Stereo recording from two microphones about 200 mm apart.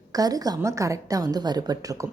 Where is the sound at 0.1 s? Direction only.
20° right (ahead or behind).